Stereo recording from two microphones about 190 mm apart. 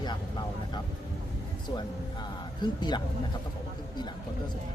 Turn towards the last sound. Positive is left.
turn(degrees=25)  # may be behind; listen again after turning